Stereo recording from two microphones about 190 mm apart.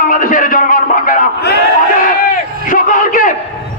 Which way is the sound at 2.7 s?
45° left (ahead or behind).